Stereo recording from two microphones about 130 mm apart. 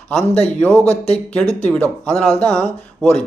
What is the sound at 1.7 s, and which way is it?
A man's voice, 10° left (ahead or behind).